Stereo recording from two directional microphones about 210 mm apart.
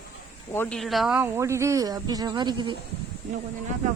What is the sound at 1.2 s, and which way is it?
Speech, 10° right (ahead or behind).